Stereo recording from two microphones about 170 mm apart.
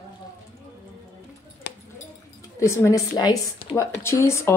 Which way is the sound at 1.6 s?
90° left.